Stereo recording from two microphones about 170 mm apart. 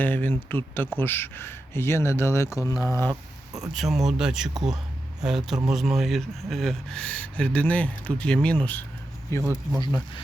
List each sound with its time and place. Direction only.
0.0 s speech: 10° left (ahead or behind)
3.1 s a sound: 20° right (ahead or behind)
3.8 s speech: centre (ahead or behind)
9.4 s speech: 15° right (ahead or behind)